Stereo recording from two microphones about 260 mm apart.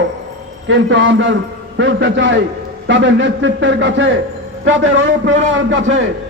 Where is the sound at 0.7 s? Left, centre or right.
Right.